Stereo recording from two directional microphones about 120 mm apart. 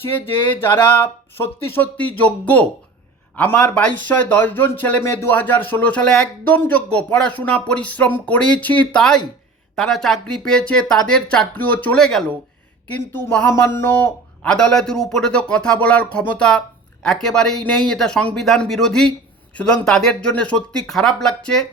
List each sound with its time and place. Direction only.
0.1 s speech: 15° left (ahead or behind)
12.9 s a sound: 20° left (ahead or behind)
14.4 s speech: 5° left (ahead or behind)